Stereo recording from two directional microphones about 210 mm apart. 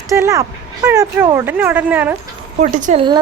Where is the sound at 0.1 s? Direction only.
15° right (ahead or behind).